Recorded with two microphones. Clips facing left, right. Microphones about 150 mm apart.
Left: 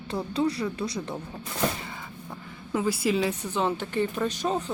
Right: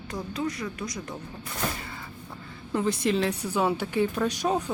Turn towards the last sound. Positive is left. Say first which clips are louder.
# right 1 dB
turn(degrees=-10)  # may be behind; listen again after turning